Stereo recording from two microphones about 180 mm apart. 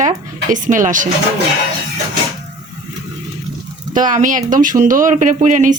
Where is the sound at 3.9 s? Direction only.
45° right (ahead or behind).